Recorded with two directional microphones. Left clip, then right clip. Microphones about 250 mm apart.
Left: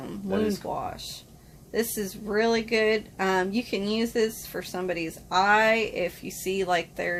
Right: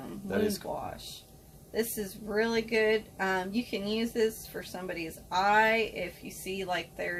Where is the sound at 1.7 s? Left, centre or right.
Left.